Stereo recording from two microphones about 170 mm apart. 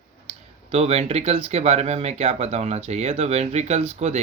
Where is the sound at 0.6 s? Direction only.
40° right (ahead or behind).